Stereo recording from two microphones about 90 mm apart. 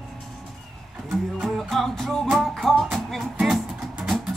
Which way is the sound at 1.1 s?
Centre (ahead or behind).